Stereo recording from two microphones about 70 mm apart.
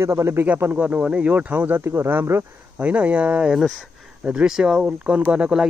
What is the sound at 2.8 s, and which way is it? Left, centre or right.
A man's voice, centre.